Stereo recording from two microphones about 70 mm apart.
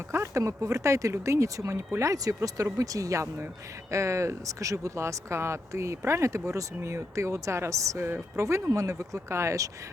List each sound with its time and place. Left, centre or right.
0.1 s speech: right